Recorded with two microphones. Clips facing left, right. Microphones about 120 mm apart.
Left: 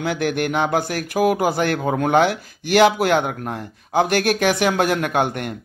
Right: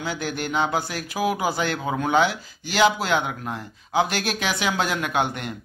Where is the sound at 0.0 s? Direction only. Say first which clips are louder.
Left 7 dB; 60° left (ahead or behind).